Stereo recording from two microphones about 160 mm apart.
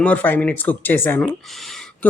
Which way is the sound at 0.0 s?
10° left (ahead or behind).